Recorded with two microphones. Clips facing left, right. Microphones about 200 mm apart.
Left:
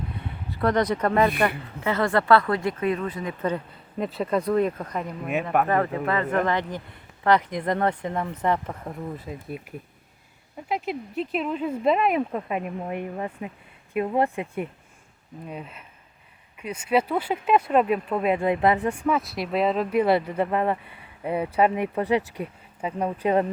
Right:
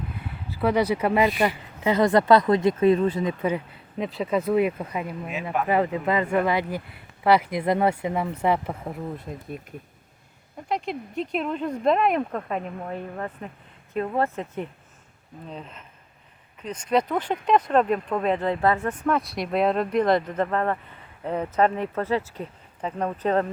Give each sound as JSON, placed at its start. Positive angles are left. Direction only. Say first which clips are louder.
{"t": 0.5, "sound": "speech", "louder": "right 1 dB", "side_deg": -5}
{"t": 3.4, "sound": "speech", "louder": "right 1 dB", "side_deg": -5}
{"t": 5.3, "sound": "speech", "louder": "left 5 dB", "side_deg": 55}
{"t": 5.6, "sound": "speech", "louder": "right 1 dB", "side_deg": -15}
{"t": 10.7, "sound": "speech", "louder": "even", "side_deg": 5}